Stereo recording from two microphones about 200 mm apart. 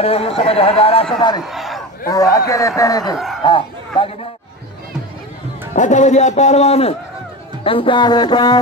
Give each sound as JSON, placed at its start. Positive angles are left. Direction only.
{"t": 0.0, "sound": "a man's voice", "side_deg": 30}
{"t": 1.4, "sound": "crowd", "side_deg": 0}
{"t": 2.0, "sound": "a man's voice", "side_deg": 15}
{"t": 5.8, "sound": "a man's voice", "side_deg": 40}